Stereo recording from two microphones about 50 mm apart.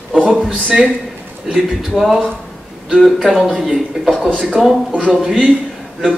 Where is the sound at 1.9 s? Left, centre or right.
Centre.